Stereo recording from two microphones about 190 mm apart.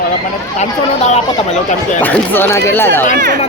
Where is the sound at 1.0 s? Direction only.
35° left (ahead or behind).